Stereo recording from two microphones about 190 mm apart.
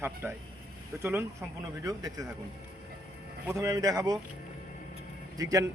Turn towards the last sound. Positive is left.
turn(degrees=-15)  # may be behind; listen again after turning